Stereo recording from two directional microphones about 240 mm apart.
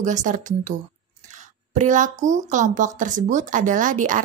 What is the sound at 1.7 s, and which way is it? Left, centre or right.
Speech, right.